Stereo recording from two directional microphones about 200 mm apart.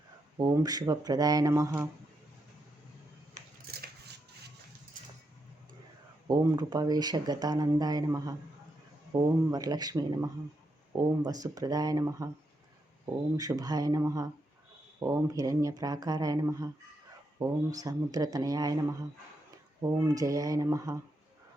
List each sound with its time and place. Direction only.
0.3 s speech: 20° right (ahead or behind)
3.7 s scissors: 50° right (ahead or behind)
6.2 s speech: 20° right (ahead or behind)
13.3 s speech: 20° right (ahead or behind)